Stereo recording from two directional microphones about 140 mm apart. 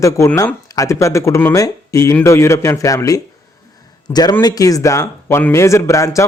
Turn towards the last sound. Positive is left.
turn(degrees=20)  # may be behind; listen again after turning